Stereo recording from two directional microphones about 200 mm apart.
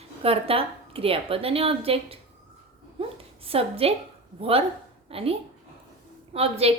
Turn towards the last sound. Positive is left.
turn(degrees=-30)  # may be behind; listen again after turning